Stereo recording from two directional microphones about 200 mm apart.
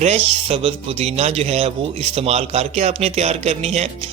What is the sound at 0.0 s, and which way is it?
Speech, 30° right (ahead or behind).